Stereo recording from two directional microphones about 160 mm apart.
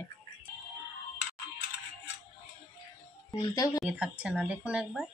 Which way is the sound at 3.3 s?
25° left (ahead or behind).